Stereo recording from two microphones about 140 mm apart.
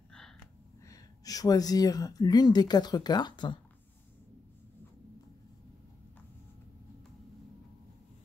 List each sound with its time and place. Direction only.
0.8 s speech: 25° left (ahead or behind)